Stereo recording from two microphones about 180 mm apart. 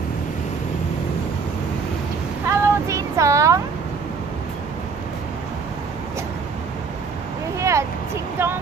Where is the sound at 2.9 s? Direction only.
15° right (ahead or behind).